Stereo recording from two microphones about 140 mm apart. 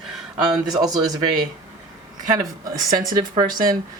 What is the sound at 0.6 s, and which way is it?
Speech, 30° right (ahead or behind).